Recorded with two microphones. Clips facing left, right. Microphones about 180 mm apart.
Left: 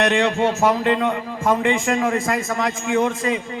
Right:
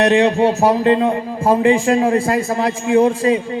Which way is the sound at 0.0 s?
35° right (ahead or behind).